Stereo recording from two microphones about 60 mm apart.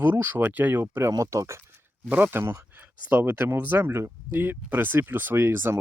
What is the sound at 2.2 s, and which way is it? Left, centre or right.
Speech, right.